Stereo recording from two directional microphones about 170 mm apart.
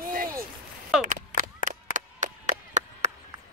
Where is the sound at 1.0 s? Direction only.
45° right (ahead or behind).